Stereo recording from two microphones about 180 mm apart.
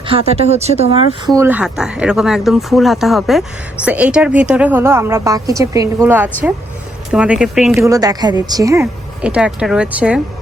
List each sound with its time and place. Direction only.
0.1 s speech: 35° right (ahead or behind)
1.4 s speech: 10° right (ahead or behind)
7.9 s speech: 20° right (ahead or behind)